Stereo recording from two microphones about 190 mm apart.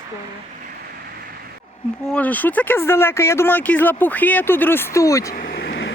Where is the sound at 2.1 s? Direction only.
10° left (ahead or behind).